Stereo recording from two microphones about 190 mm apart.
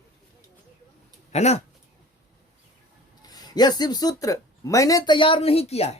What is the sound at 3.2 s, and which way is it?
Speech, 20° left (ahead or behind).